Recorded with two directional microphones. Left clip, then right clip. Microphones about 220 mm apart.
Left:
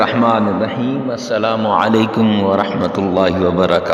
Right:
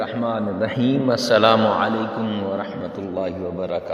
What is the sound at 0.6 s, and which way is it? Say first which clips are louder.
A man's voice: left 2 dB; 5° left (ahead or behind).